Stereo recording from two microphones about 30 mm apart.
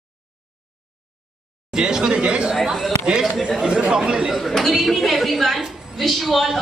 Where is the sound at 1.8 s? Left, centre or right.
Right.